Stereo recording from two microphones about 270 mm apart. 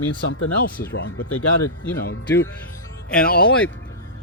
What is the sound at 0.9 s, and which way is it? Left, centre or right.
Speech, left.